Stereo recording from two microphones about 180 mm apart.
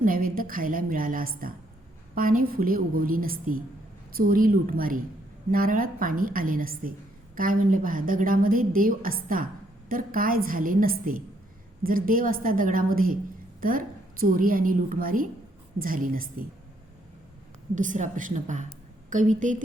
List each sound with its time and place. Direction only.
0.0 s a woman's voice: 50° right (ahead or behind)
17.7 s a woman's voice: 45° right (ahead or behind)